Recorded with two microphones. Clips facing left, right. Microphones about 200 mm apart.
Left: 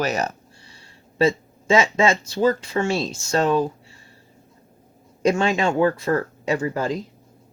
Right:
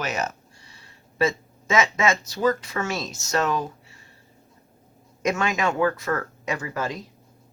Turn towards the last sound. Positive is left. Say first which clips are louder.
# left 6 dB
turn(degrees=30)  # may be behind; listen again after turning